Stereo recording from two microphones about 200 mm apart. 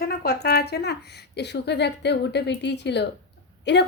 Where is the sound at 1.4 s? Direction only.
55° left (ahead or behind).